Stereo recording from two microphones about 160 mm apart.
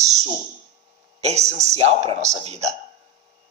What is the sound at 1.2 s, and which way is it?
Speech, 45° right (ahead or behind).